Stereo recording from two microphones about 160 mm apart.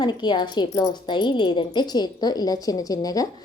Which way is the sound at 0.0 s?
30° left (ahead or behind).